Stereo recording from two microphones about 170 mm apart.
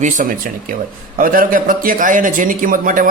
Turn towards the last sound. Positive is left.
turn(degrees=-50)  # may be behind; listen again after turning